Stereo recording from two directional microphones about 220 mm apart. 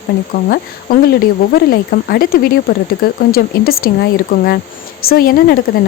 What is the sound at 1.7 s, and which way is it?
A woman's voice, 40° left (ahead or behind).